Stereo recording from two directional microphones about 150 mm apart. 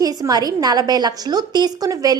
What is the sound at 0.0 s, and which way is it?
A woman's voice, 25° right (ahead or behind).